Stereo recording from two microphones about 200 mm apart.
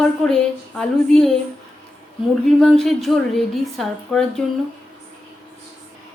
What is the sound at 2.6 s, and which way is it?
A woman's voice, centre (ahead or behind).